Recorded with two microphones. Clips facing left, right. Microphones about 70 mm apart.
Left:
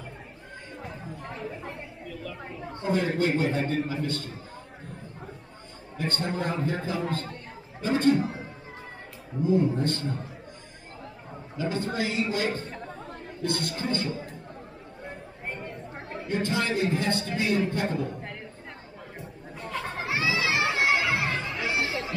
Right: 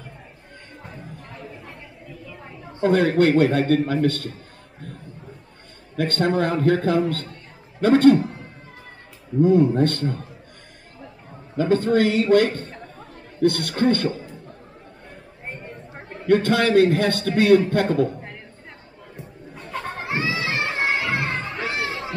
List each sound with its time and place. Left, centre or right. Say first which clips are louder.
1.4 s a sound: left 4 dB; left
2.8 s speech: right 9 dB; right
5.9 s speech: right 9 dB; right
8.2 s music: right 1 dB; centre
9.4 s speech: right 8 dB; right
11.5 s a man's voice: right 11 dB; right
15.9 s chatter: even; centre
16.3 s a man's voice: right 10 dB; right
19.5 s a sound: right 2 dB; centre
20.2 s crowd: right 1 dB; centre
21.5 s crowd: right 2 dB; right